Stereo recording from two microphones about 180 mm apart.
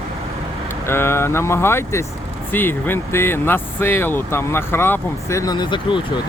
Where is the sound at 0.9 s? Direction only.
15° left (ahead or behind).